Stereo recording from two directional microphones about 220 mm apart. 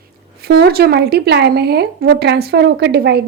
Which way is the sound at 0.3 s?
45° right (ahead or behind).